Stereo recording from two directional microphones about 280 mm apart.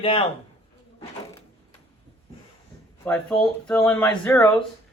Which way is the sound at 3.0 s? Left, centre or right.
Centre.